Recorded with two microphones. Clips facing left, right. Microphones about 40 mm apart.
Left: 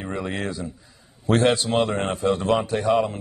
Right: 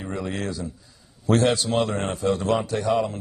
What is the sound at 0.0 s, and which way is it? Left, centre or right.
A man's voice, left.